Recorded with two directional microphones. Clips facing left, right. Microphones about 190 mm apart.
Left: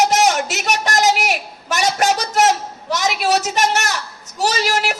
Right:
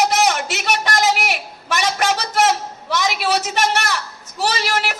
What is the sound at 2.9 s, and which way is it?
A woman's voice, 40° left (ahead or behind).